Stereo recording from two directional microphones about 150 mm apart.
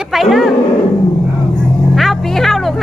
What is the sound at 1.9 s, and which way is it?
Music, centre (ahead or behind).